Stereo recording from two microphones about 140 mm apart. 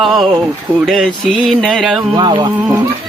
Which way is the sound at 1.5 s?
5° left (ahead or behind).